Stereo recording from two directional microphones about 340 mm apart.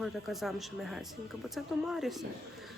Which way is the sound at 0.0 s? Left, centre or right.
Centre.